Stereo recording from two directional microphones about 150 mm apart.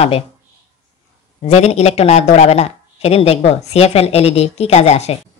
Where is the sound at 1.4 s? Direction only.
45° left (ahead or behind).